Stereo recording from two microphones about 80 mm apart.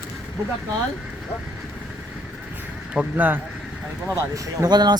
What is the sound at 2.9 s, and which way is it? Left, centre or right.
Speech, centre.